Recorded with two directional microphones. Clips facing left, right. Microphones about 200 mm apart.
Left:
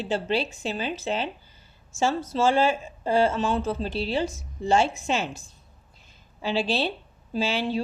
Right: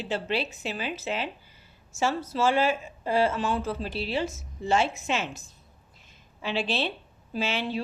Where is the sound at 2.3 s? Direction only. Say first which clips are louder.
Left 2 dB; 30° left (ahead or behind).